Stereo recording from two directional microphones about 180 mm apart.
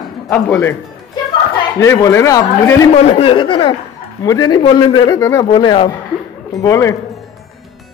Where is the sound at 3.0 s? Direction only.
35° left (ahead or behind); by 6.9 s 15° left (ahead or behind).